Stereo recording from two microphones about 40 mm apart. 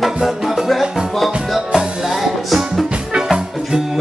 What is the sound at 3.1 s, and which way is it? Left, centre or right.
Music, centre.